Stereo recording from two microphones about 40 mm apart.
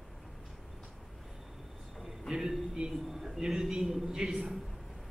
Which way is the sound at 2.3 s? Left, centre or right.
Centre.